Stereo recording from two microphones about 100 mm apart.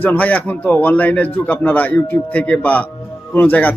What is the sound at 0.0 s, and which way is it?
A man's voice, 15° left (ahead or behind).